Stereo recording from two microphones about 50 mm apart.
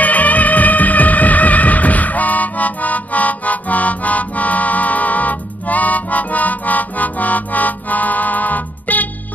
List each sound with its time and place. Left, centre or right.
0.0 s music: left